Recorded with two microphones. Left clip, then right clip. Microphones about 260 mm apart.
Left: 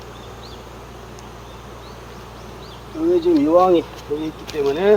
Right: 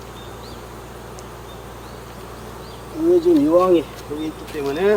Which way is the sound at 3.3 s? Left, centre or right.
Centre.